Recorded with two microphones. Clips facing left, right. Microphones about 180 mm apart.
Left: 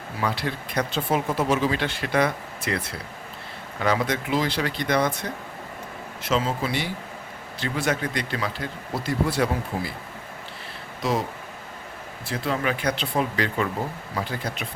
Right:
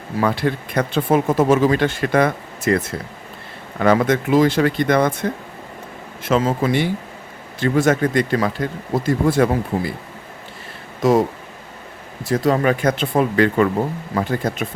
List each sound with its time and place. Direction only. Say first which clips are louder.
0.2 s speech: right 8 dB; 50° right (ahead or behind)
11.0 s speech: right 10 dB; 50° right (ahead or behind)
12.2 s speech: right 9 dB; 45° right (ahead or behind)